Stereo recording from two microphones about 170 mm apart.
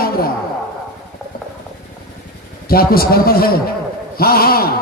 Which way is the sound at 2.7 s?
60° left (ahead or behind).